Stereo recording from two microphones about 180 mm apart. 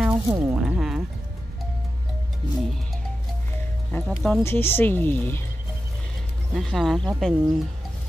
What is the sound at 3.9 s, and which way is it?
Speech, 5° left (ahead or behind).